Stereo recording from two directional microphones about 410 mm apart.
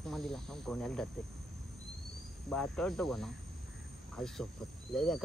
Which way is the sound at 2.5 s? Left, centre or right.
Centre.